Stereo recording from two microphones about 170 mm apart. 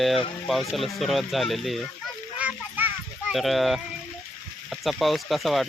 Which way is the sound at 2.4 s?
10° right (ahead or behind).